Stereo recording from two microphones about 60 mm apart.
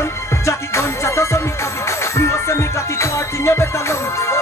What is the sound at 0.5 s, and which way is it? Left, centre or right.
Music, left.